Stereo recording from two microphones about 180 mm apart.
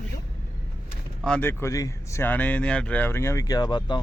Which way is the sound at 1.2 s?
10° left (ahead or behind).